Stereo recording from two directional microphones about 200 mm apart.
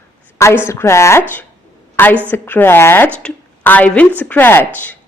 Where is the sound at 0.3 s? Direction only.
15° left (ahead or behind).